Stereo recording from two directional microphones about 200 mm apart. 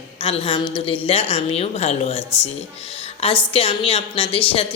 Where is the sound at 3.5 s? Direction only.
30° left (ahead or behind).